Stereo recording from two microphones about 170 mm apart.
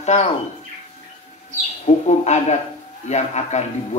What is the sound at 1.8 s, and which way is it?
A man's voice, 40° left (ahead or behind).